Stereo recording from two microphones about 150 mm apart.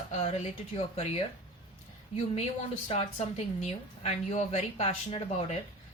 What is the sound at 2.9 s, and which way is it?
A woman's voice, 45° left (ahead or behind).